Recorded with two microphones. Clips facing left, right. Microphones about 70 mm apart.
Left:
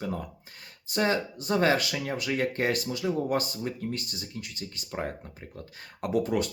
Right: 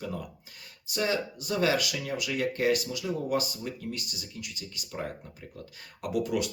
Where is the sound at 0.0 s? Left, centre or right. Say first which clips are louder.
Left 3 dB; left.